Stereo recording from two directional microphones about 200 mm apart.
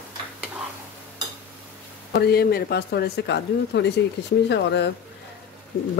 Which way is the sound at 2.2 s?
50° left (ahead or behind).